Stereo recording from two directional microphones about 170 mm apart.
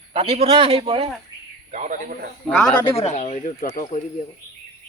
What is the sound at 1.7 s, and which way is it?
Speech, 45° right (ahead or behind).